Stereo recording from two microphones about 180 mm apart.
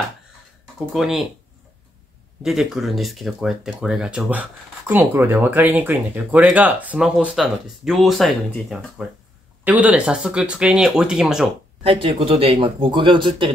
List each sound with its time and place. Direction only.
0.9 s speech: centre (ahead or behind)
2.4 s speech: centre (ahead or behind)
9.7 s speech: 10° right (ahead or behind)
11.8 s speech: 30° right (ahead or behind)